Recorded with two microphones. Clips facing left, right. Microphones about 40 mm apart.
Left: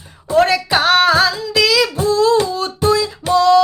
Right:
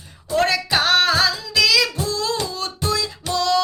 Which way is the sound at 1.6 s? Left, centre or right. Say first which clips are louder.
Left 3 dB; centre.